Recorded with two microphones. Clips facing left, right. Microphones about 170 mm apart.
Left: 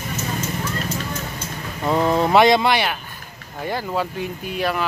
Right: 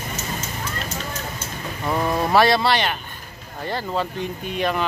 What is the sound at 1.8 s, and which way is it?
Speech, 20° left (ahead or behind).